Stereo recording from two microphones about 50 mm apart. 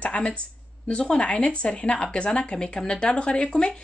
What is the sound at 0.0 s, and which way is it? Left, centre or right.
A woman's voice, left.